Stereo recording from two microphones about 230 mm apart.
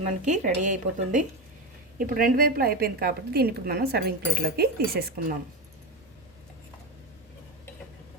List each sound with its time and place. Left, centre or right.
0.0 s a woman's voice: right